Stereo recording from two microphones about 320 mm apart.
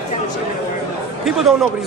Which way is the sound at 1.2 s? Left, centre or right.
Centre.